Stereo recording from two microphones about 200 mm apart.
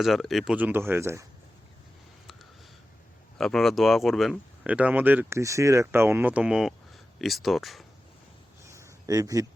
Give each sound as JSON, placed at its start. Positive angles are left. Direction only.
{"t": 0.0, "sound": "speech", "side_deg": 0}
{"t": 3.3, "sound": "speech", "side_deg": 0}
{"t": 8.7, "sound": "a sound", "side_deg": -15}